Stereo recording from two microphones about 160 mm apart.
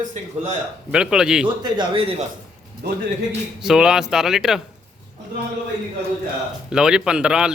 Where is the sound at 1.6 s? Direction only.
30° right (ahead or behind).